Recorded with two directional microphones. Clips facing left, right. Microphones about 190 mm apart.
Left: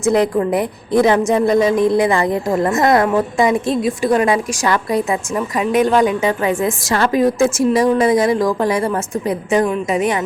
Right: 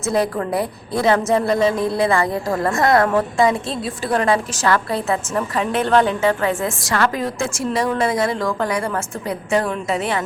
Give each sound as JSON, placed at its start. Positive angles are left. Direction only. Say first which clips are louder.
{"t": 0.0, "sound": "a woman's voice", "louder": "left 5 dB", "side_deg": 20}